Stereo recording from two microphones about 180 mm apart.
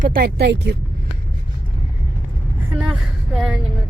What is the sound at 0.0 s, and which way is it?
Speech, 55° right (ahead or behind).